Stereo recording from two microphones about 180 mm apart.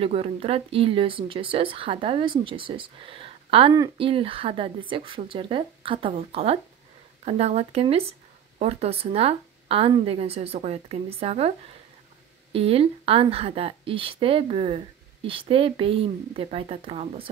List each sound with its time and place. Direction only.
0.0 s speech: 30° right (ahead or behind)
12.5 s speech: 35° right (ahead or behind)